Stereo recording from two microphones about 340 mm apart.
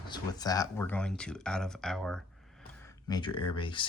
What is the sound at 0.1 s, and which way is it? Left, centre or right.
Speech, centre.